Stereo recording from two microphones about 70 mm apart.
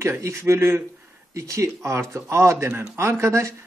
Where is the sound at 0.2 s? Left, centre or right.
Right.